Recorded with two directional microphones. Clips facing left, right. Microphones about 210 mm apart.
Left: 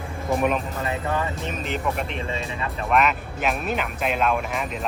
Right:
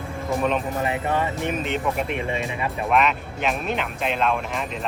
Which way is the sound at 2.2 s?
15° right (ahead or behind).